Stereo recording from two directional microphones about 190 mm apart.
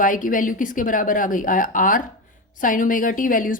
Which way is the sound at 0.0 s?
45° left (ahead or behind).